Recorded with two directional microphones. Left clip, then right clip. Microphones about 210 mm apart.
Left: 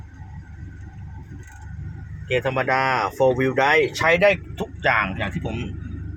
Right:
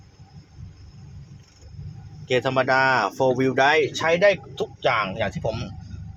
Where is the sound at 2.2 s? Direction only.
20° right (ahead or behind).